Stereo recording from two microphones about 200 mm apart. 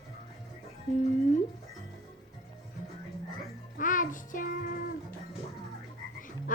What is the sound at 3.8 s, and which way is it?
Music, 40° left (ahead or behind).